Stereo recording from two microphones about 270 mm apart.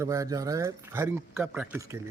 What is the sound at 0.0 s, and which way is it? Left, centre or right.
A man's voice, centre.